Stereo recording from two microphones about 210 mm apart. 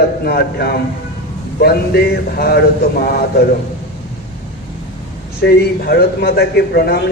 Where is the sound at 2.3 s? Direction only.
50° left (ahead or behind).